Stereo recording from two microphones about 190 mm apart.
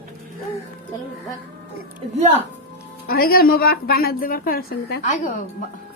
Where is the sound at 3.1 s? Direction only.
50° left (ahead or behind).